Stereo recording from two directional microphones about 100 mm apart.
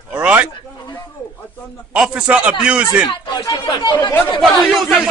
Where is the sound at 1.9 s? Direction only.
10° right (ahead or behind).